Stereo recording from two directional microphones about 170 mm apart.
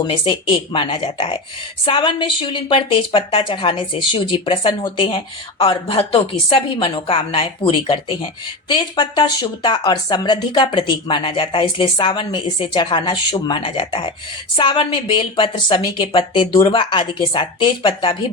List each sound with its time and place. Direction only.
0.3 s a woman's voice: 30° left (ahead or behind)